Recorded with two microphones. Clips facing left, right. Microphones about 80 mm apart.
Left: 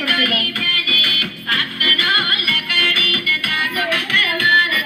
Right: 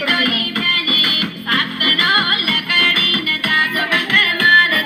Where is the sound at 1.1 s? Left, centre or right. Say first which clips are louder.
Right 2 dB; right.